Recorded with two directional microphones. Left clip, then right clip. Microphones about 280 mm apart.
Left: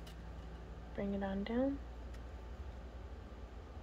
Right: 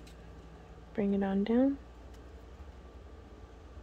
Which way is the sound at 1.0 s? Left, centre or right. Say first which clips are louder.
Right 8 dB; right.